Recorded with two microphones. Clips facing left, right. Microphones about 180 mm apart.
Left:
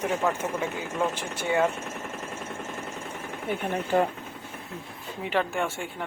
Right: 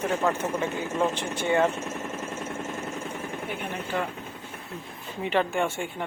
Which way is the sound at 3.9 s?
40° left (ahead or behind).